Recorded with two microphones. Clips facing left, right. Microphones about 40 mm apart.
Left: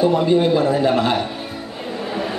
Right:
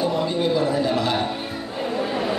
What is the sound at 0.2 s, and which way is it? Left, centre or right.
Speech, left.